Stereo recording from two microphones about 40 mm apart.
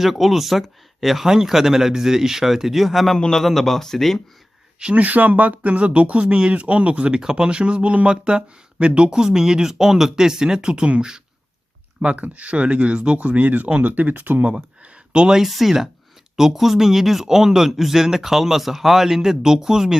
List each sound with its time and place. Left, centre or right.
0.0 s speech: centre
3.2 s a man's voice: centre
3.4 s speech: centre
4.9 s speech: right
7.2 s speech: centre
12.1 s speech: right
13.1 s speech: right
15.1 s speech: right
15.4 s speech: centre